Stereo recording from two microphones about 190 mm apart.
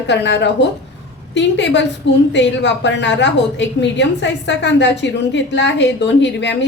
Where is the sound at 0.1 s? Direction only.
65° left (ahead or behind).